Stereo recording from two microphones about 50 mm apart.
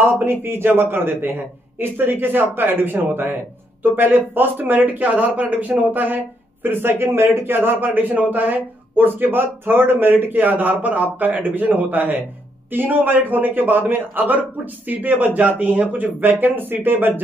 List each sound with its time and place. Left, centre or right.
0.2 s a man's voice: right